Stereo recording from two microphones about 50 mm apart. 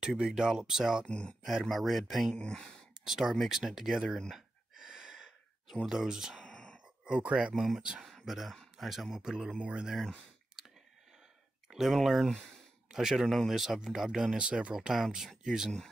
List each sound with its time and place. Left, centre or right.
0.0 s speech: centre
1.0 s speech: centre
1.4 s speech: centre
2.3 s speech: centre
3.1 s speech: centre
4.3 s gasp: centre
6.4 s a sound: centre
7.1 s speech: centre
8.0 s speech: centre; by 9.8 s right
10.6 s clicking: centre
11.7 s speech: centre